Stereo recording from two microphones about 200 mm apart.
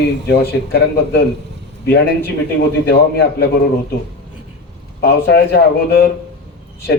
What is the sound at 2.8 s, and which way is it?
Speech, 55° left (ahead or behind).